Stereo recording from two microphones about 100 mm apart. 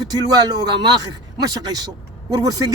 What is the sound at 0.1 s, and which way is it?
Speech, 40° right (ahead or behind).